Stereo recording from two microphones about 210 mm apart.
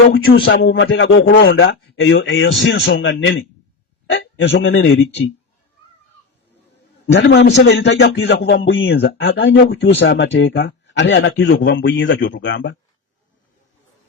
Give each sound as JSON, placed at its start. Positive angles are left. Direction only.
{"t": 0.4, "sound": "a man's voice", "side_deg": 65}
{"t": 1.2, "sound": "a man's voice", "side_deg": 50}
{"t": 7.1, "sound": "a man's voice", "side_deg": 55}